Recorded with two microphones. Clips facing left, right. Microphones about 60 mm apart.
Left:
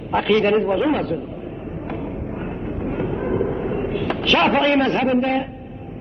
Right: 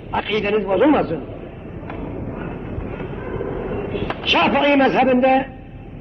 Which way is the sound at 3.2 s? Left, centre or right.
Centre.